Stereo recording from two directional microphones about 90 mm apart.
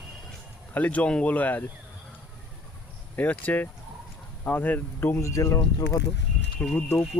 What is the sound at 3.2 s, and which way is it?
Speech, 20° left (ahead or behind).